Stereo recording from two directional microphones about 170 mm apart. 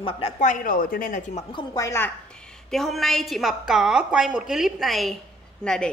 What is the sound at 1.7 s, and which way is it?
Speech, 15° left (ahead or behind).